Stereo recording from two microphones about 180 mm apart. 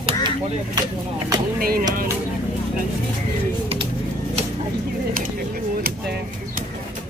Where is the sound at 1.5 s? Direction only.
55° right (ahead or behind).